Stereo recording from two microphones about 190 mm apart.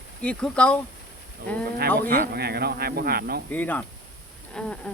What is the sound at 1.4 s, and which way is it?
Speech, 60° right (ahead or behind).